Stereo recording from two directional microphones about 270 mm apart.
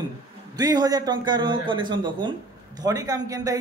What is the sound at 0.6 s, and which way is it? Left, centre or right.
A man's voice, centre.